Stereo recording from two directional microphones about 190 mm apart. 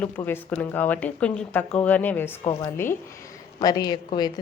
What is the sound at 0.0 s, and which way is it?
Speech, 10° left (ahead or behind).